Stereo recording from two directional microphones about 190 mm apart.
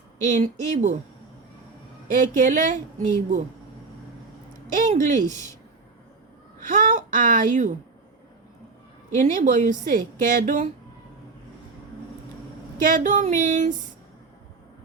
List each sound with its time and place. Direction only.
0.3 s a woman's voice: 40° right (ahead or behind)
2.3 s a woman's voice: 45° right (ahead or behind)
4.7 s a woman's voice: 40° right (ahead or behind)
6.6 s speech: 45° right (ahead or behind)
9.1 s a woman's voice: 40° right (ahead or behind)
12.8 s a woman's voice: 45° right (ahead or behind)